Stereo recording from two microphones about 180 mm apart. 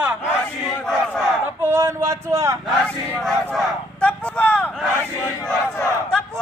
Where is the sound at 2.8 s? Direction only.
5° left (ahead or behind).